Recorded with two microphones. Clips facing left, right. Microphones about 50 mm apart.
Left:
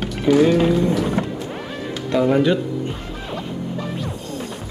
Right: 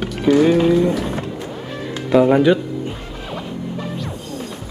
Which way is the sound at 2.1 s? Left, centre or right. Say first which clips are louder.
Right 5 dB; right.